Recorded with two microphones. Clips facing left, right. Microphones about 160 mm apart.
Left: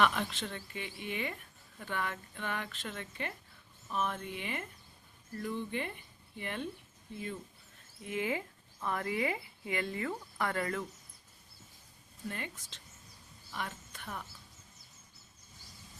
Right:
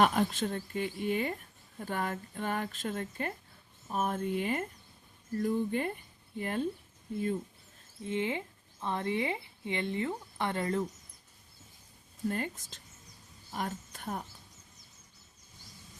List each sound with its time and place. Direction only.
0.0 s speech: 45° right (ahead or behind)
8.0 s speech: 25° right (ahead or behind)
12.3 s speech: 45° right (ahead or behind)